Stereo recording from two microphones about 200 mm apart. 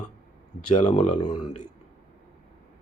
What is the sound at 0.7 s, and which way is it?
Speech, 35° left (ahead or behind).